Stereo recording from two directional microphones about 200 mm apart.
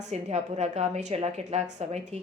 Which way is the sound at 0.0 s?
35° right (ahead or behind).